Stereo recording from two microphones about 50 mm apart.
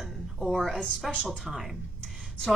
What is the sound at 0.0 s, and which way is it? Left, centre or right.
Music, centre.